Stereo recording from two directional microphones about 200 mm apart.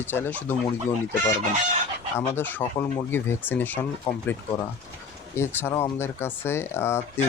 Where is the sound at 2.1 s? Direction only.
10° left (ahead or behind).